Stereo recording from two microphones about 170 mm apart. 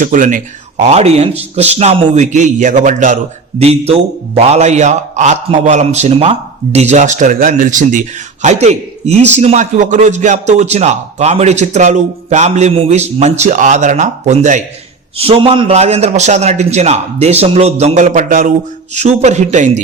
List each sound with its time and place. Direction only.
0.0 s speech: 50° right (ahead or behind)
3.6 s a man's voice: 35° right (ahead or behind)
15.2 s a man's voice: 35° right (ahead or behind)